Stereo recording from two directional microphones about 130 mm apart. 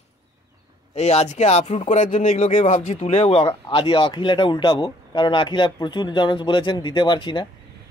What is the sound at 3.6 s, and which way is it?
Speech, 40° left (ahead or behind).